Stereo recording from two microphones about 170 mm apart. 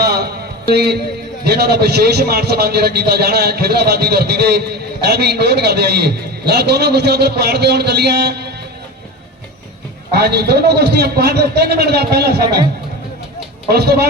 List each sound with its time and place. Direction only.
0.0 s a sound: 70° right (ahead or behind)
0.7 s a man's voice: 70° right (ahead or behind)
10.1 s a man's voice: 75° right (ahead or behind)
13.7 s a man's voice: 70° right (ahead or behind)